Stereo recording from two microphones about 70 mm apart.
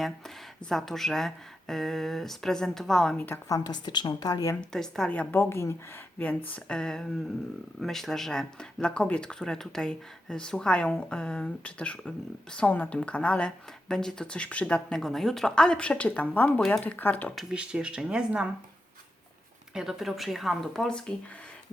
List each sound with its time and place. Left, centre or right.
0.7 s speech: centre
3.2 s speech: left
3.5 s a woman's voice: left
4.7 s speech: centre
5.3 s speech: left
6.1 s speech: left
14.9 s speech: centre; by 17.3 s left
17.5 s speech: centre
19.7 s speech: centre